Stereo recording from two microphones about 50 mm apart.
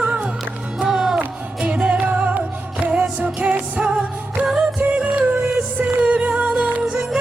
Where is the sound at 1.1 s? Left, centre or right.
Right.